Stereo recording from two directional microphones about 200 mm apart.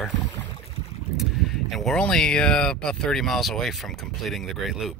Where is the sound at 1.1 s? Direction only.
Centre (ahead or behind).